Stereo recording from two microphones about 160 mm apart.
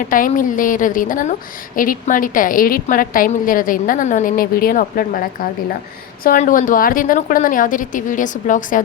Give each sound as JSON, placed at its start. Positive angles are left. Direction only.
{"t": 0.0, "sound": "a woman's voice", "side_deg": 55}